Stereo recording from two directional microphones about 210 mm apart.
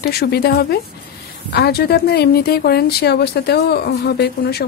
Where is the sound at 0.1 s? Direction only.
50° left (ahead or behind).